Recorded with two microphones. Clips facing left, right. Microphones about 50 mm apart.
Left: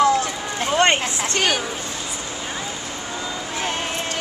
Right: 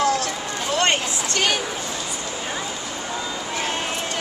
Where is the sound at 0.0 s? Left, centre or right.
Centre.